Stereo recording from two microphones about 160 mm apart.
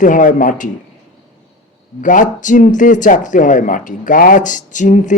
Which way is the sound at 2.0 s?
55° left (ahead or behind).